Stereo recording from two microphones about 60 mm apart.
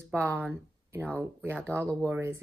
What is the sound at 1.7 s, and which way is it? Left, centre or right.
Speech, left.